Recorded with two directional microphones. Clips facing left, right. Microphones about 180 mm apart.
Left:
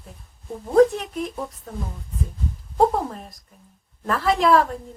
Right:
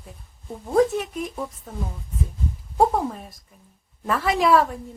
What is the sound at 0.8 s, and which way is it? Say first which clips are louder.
Speech: left 4 dB; centre (ahead or behind).